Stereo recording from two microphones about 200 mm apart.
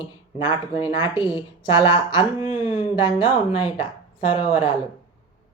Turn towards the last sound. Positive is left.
turn(degrees=25)  # may be behind; listen again after turning